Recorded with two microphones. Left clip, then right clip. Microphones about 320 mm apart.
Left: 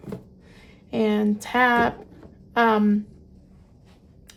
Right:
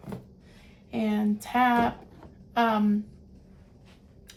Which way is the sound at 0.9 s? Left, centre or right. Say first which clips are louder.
Left 7 dB; left.